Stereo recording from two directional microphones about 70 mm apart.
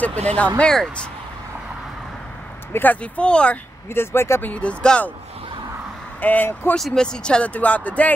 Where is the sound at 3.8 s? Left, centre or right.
Left.